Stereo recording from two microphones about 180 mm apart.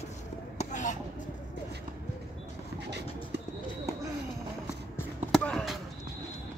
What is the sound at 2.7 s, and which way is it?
Music, 70° right (ahead or behind).